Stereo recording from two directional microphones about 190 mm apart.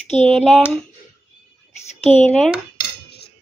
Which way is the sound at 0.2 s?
Centre (ahead or behind).